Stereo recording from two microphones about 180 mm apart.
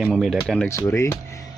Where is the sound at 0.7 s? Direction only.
15° left (ahead or behind).